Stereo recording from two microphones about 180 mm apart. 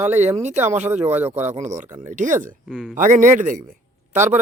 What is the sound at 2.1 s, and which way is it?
Speech, 45° right (ahead or behind).